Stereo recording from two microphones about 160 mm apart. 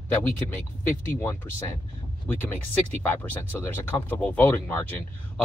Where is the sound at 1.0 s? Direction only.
15° left (ahead or behind).